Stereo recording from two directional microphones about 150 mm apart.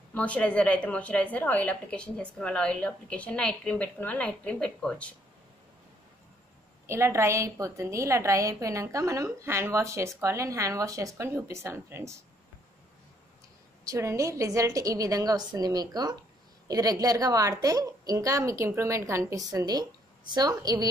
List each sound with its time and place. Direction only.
0.1 s a woman's voice: 10° left (ahead or behind)
6.9 s a woman's voice: 20° right (ahead or behind)
13.8 s a woman's voice: 20° right (ahead or behind)